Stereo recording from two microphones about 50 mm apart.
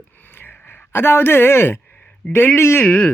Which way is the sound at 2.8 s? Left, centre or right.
Left.